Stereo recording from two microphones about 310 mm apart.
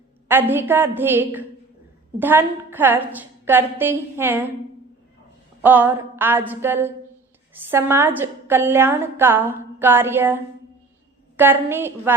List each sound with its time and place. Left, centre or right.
0.3 s a woman's voice: centre
5.6 s a woman's voice: centre